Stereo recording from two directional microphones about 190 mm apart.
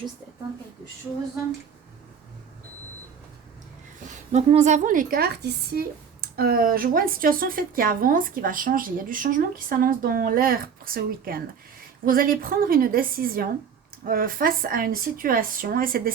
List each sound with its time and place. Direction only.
4.3 s speech: 35° right (ahead or behind)